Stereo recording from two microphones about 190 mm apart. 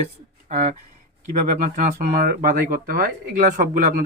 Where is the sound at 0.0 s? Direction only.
40° right (ahead or behind).